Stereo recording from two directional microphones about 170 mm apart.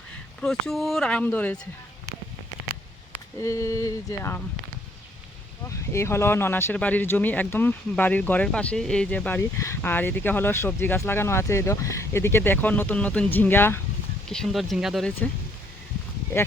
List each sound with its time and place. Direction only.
0.4 s speech: centre (ahead or behind)
3.4 s speech: 15° left (ahead or behind)
5.6 s speech: 15° left (ahead or behind)
14.3 s speech: 5° left (ahead or behind)
16.3 s speech: 15° left (ahead or behind)